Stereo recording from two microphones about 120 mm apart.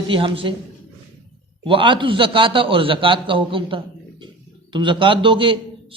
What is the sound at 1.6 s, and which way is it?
Speech, 45° right (ahead or behind).